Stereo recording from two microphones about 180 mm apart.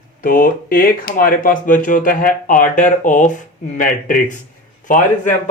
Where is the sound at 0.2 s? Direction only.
50° left (ahead or behind).